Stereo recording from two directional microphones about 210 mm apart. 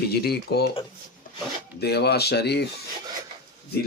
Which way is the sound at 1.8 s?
50° left (ahead or behind).